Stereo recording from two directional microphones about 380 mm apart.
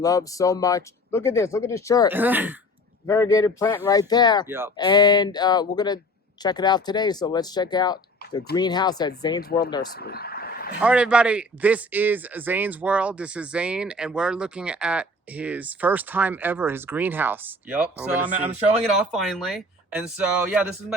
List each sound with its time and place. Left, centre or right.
0.0 s speech: centre
2.1 s a man's voice: centre
3.1 s speech: centre
4.4 s a man's voice: centre
4.8 s speech: centre
8.2 s a sound: left
8.5 s speech: centre
10.0 s vehicle: left
10.8 s a man's voice: centre